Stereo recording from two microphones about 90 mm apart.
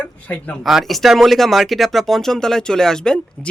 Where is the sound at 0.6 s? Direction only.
Centre (ahead or behind).